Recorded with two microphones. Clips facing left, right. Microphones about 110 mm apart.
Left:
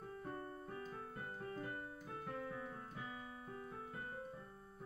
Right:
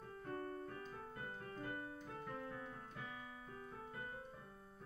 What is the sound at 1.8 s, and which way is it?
Keyboard, 5° left (ahead or behind).